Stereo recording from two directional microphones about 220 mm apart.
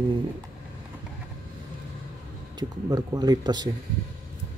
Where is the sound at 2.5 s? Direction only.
15° right (ahead or behind).